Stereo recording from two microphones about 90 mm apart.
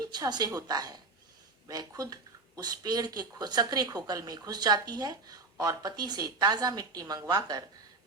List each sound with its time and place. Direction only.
0.0 s speech: 50° right (ahead or behind)